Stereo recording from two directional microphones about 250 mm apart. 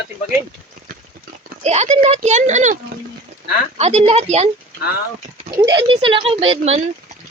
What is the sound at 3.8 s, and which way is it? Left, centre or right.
Speech, right.